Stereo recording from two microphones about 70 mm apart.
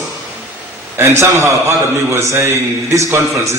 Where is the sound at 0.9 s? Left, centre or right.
Right.